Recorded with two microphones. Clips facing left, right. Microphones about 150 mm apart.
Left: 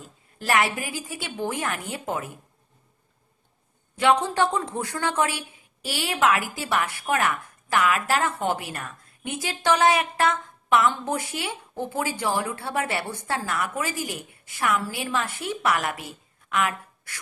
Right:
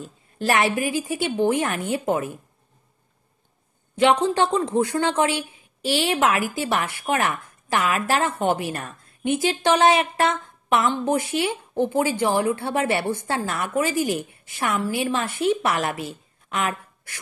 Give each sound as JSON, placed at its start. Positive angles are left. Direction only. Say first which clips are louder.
{"t": 0.0, "sound": "speech", "louder": "right 7 dB", "side_deg": -25}
{"t": 3.9, "sound": "speech", "louder": "right 3 dB", "side_deg": -20}